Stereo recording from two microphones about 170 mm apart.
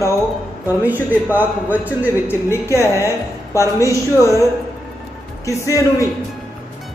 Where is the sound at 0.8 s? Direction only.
10° right (ahead or behind).